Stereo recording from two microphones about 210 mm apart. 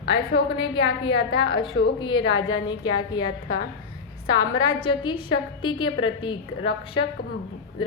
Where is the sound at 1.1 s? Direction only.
60° left (ahead or behind).